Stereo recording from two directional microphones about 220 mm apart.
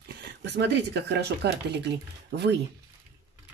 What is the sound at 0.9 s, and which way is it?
Speech, 50° right (ahead or behind).